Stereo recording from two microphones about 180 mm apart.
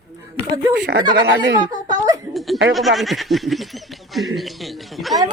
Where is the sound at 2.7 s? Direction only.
Centre (ahead or behind).